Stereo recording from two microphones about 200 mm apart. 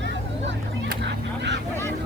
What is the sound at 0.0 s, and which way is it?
Vehicle, 60° right (ahead or behind).